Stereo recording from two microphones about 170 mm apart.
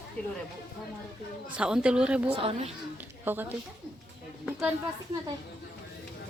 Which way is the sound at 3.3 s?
10° right (ahead or behind).